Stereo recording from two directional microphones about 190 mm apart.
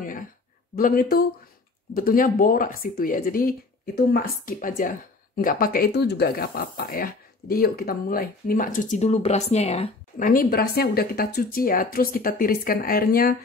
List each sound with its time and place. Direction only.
0.7 s speech: 50° left (ahead or behind); by 9.9 s 30° left (ahead or behind)
10.1 s speech: 45° left (ahead or behind)